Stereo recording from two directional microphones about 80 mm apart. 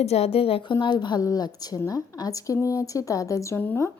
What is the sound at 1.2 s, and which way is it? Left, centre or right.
A woman's voice, left.